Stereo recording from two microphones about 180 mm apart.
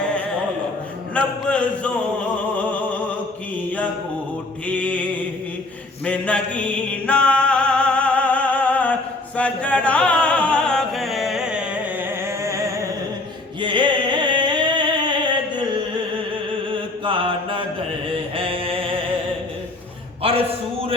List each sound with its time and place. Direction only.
1.5 s music: 5° left (ahead or behind)
4.6 s music: 5° left (ahead or behind)
6.1 s music: 5° left (ahead or behind); by 12.6 s 15° right (ahead or behind)
13.6 s music: 25° right (ahead or behind)
16.7 s mantra: 30° right (ahead or behind)